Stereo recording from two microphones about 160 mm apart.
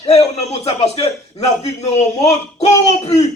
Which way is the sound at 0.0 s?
40° left (ahead or behind).